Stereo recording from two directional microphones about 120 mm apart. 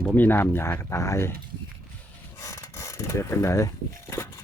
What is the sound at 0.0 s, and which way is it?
Speech, 15° left (ahead or behind).